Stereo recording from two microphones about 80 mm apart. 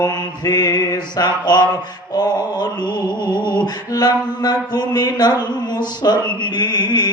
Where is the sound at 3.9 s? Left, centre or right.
Left.